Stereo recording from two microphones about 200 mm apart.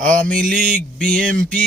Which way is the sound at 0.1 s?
45° right (ahead or behind).